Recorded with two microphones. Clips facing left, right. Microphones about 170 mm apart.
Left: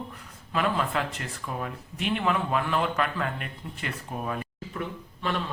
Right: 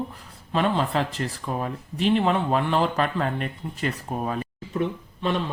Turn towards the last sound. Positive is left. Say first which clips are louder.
# right 4 dB
turn(degrees=-20)  # may be behind; listen again after turning